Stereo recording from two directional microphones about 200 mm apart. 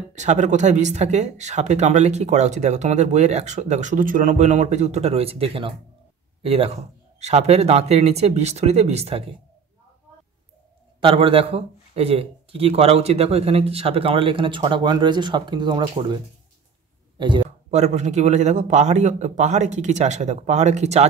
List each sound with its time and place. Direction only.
0.1 s speech: 35° right (ahead or behind)
11.0 s speech: 25° right (ahead or behind)
17.2 s speech: 25° right (ahead or behind)